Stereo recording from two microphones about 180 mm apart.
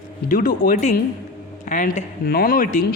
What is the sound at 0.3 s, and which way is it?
Speech, 50° left (ahead or behind).